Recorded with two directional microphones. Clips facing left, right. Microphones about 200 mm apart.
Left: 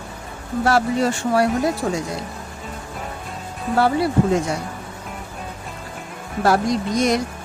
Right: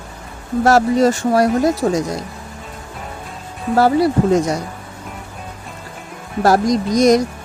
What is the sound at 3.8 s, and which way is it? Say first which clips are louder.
Speech: right 4 dB; 40° right (ahead or behind).